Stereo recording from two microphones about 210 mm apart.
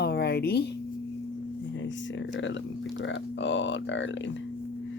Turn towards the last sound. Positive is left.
turn(degrees=60)  # may be behind; listen again after turning